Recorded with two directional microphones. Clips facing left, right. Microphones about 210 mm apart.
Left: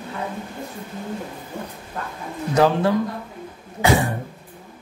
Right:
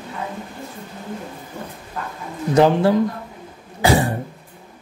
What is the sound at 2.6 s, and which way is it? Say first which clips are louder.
Speech: right 3 dB; 30° right (ahead or behind).